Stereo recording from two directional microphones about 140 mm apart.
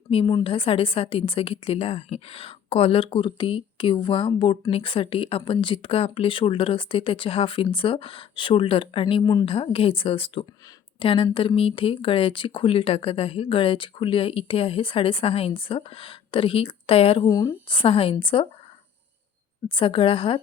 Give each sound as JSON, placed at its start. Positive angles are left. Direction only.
{"t": 0.1, "sound": "speech", "side_deg": 35}
{"t": 9.5, "sound": "speech", "side_deg": 40}
{"t": 19.6, "sound": "speech", "side_deg": 40}